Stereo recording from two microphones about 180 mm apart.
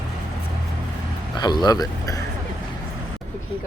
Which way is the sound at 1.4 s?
25° left (ahead or behind).